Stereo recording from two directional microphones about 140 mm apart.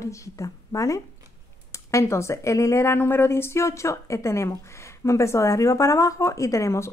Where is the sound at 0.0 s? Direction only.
20° left (ahead or behind).